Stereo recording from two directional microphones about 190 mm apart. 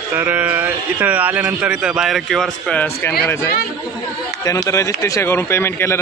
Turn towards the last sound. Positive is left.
turn(degrees=15)  # may be behind; listen again after turning